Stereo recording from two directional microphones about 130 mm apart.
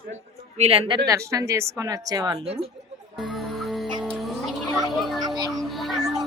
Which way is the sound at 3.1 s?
Centre (ahead or behind).